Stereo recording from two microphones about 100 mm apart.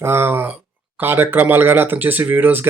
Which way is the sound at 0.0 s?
25° right (ahead or behind).